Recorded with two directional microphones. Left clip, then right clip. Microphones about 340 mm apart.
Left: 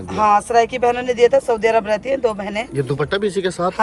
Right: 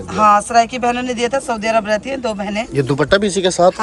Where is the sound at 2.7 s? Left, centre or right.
Right.